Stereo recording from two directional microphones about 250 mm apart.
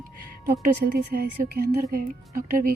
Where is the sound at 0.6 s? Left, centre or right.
Right.